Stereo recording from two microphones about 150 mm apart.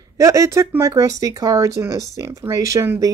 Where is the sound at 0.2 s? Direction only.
20° right (ahead or behind).